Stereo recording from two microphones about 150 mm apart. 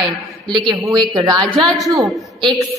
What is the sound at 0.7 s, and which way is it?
Speech, 30° right (ahead or behind).